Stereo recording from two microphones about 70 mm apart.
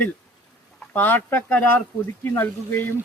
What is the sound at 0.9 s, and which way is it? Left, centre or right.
A man's voice, left.